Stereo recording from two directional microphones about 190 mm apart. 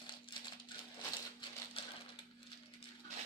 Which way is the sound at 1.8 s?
30° left (ahead or behind).